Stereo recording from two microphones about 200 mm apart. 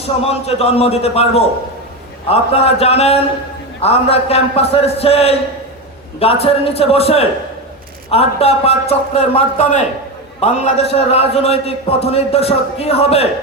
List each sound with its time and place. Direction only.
0.2 s a man's voice: 30° left (ahead or behind)